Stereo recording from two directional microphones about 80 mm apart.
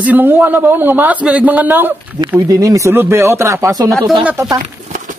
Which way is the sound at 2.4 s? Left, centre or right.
Right.